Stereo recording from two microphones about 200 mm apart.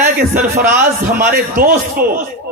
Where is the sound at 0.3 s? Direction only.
50° right (ahead or behind).